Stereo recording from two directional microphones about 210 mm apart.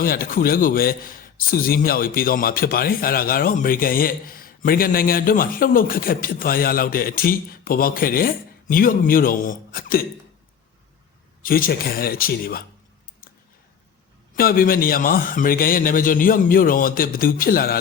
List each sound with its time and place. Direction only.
0.0 s a man's voice: 45° left (ahead or behind)
11.4 s a man's voice: 45° left (ahead or behind)
14.3 s a man's voice: 45° left (ahead or behind)